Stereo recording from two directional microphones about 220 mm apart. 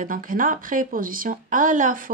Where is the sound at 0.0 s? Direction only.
40° right (ahead or behind).